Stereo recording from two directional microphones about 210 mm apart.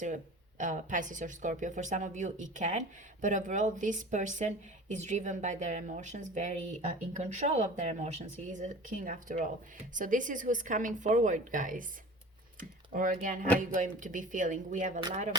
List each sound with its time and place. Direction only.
0.6 s speech: 35° right (ahead or behind)